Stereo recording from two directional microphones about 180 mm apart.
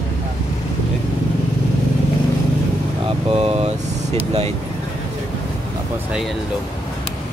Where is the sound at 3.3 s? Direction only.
35° right (ahead or behind).